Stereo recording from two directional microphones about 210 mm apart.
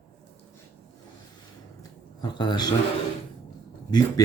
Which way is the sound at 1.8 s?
20° left (ahead or behind).